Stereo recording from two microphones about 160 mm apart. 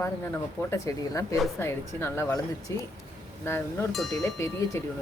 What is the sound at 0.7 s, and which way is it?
Speech, 20° left (ahead or behind).